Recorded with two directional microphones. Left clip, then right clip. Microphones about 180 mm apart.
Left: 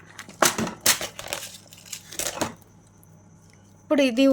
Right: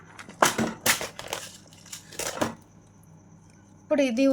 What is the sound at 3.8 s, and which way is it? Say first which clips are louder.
Speech: left 3 dB; 30° left (ahead or behind).